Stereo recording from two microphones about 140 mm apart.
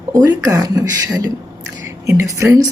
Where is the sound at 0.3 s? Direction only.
25° right (ahead or behind).